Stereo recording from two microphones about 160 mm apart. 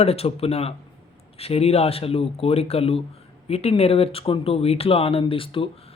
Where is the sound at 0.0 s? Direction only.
40° left (ahead or behind).